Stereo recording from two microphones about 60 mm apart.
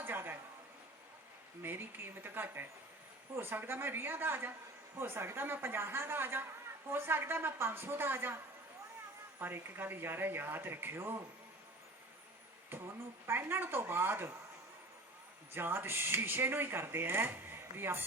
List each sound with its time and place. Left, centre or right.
0.0 s a sound: right
1.6 s a woman's voice: right
9.4 s speech: right
13.2 s speech: right
15.5 s speech: right